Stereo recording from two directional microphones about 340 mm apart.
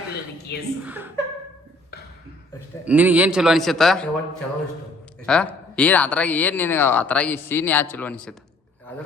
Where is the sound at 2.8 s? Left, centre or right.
Centre.